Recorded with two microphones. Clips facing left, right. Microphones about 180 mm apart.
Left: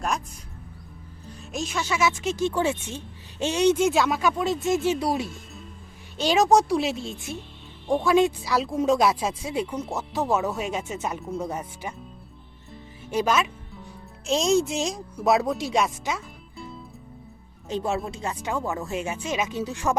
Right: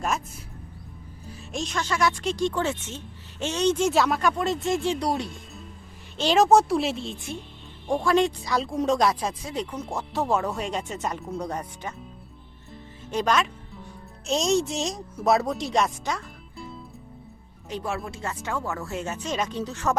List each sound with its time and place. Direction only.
1.3 s speech: 5° left (ahead or behind)
13.1 s music: 5° left (ahead or behind)
14.3 s speech: centre (ahead or behind)
17.7 s speech: 25° left (ahead or behind)